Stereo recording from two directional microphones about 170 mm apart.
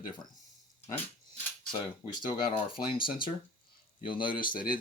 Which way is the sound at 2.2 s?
30° left (ahead or behind).